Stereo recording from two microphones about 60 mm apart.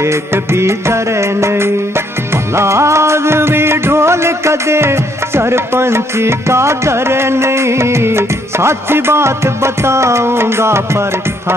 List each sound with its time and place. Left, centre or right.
0.0 s music: right